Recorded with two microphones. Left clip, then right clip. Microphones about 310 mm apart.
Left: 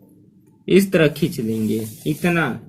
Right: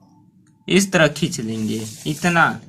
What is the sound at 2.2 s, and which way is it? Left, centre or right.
Speech, centre.